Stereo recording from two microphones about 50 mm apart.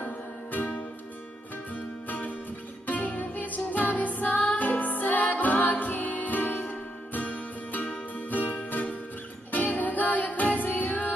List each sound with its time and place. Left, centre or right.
0.0 s music: left
2.0 s music: left